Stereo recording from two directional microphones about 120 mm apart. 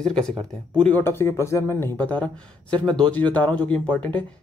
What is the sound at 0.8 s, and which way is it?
Speech, 20° left (ahead or behind).